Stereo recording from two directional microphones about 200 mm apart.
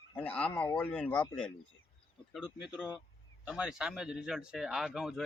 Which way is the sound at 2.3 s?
Centre (ahead or behind).